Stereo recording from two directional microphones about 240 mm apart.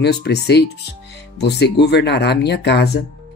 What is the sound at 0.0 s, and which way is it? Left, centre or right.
Speech, left.